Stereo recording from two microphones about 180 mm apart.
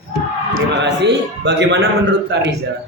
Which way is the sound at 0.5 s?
75° right (ahead or behind).